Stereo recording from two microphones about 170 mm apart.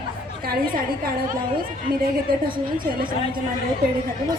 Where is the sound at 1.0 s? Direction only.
60° right (ahead or behind).